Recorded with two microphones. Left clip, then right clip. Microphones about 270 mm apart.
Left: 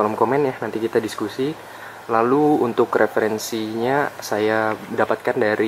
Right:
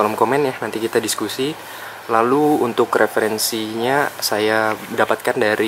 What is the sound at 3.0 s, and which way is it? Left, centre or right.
Speech, centre.